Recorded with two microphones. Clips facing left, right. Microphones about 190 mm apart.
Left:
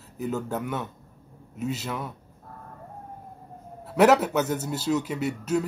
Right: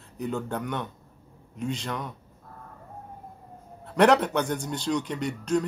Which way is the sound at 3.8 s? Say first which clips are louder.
Left 1 dB; 5° left (ahead or behind).